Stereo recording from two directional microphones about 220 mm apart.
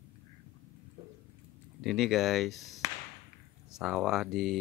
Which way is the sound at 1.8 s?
Centre (ahead or behind).